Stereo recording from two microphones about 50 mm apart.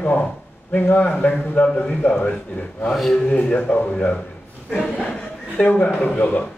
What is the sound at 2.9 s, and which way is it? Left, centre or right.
Speech, centre.